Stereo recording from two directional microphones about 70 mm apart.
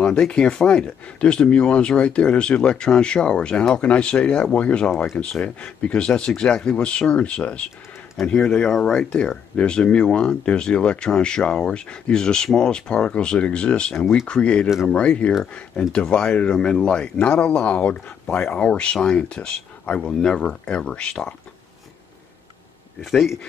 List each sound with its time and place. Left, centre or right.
0.0 s speech: centre
13.9 s speech: centre
14.2 s speech: centre